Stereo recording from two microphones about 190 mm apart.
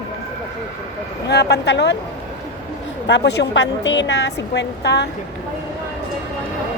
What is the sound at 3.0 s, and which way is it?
Speech, 65° left (ahead or behind).